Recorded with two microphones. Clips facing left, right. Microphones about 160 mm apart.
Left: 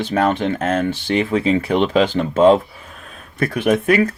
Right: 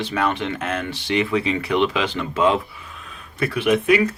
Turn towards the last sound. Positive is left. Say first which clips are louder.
# left 2 dB
turn(degrees=45)  # may be behind; listen again after turning